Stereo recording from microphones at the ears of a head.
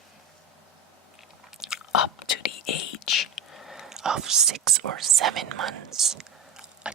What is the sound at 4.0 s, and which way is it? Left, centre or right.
Speech, right.